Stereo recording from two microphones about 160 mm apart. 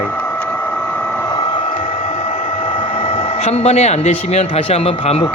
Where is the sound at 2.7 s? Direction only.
35° left (ahead or behind).